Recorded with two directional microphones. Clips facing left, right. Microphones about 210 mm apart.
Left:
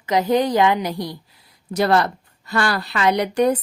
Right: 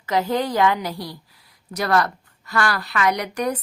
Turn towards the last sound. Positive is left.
turn(degrees=30)  # may be behind; listen again after turning